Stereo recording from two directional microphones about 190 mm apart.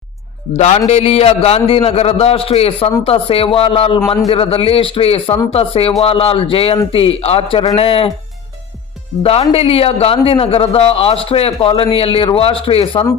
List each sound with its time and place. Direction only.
0.5 s a man's voice: 35° left (ahead or behind)
9.2 s a man's voice: 30° left (ahead or behind)